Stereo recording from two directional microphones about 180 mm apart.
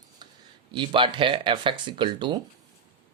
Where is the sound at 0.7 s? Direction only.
25° right (ahead or behind).